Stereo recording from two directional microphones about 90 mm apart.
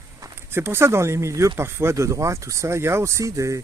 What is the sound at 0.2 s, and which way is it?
Speech, 30° right (ahead or behind).